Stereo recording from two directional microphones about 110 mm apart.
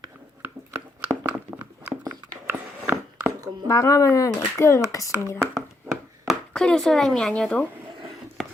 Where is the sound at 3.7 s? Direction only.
30° left (ahead or behind).